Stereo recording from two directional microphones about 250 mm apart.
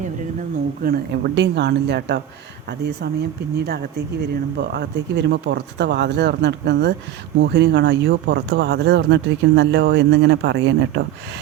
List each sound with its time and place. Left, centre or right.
0.8 s speech: right
3.6 s speech: right